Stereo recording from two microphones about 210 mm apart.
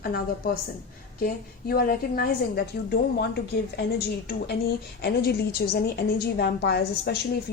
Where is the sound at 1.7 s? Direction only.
45° left (ahead or behind).